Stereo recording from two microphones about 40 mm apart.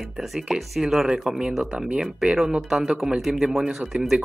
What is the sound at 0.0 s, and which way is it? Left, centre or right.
A man's voice, centre.